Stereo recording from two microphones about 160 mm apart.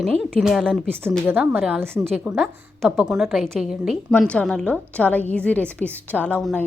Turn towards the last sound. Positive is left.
turn(degrees=5)  # may be behind; listen again after turning